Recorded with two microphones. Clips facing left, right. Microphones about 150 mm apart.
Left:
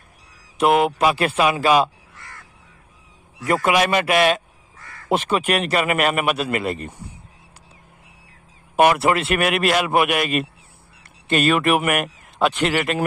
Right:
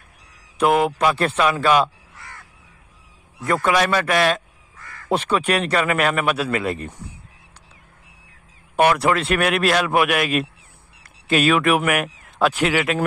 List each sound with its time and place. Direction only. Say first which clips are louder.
0.6 s a man's voice: left 1 dB; 5° left (ahead or behind)
1.4 s a man's voice: left 1 dB; 15° left (ahead or behind)
3.5 s a man's voice: left 1 dB; 10° left (ahead or behind)
5.1 s a man's voice: even; centre (ahead or behind)
8.7 s a man's voice: left 1 dB; 5° left (ahead or behind)